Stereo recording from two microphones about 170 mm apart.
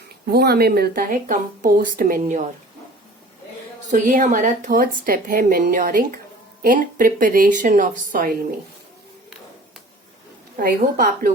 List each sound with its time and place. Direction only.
0.3 s speech: 65° right (ahead or behind); by 2.5 s 50° right (ahead or behind)
3.8 s a woman's voice: 50° right (ahead or behind)
10.6 s a woman's voice: 55° right (ahead or behind)